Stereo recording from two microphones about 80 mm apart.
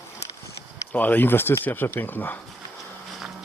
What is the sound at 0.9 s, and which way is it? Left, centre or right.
Speech, left.